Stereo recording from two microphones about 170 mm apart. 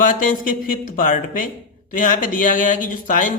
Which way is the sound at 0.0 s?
50° left (ahead or behind).